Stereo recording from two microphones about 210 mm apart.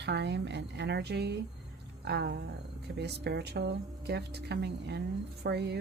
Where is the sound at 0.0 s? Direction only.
55° right (ahead or behind).